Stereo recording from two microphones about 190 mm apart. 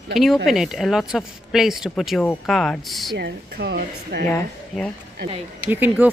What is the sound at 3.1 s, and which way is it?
A woman's voice, 65° right (ahead or behind).